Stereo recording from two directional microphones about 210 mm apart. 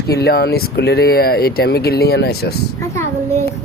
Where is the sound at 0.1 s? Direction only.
50° left (ahead or behind).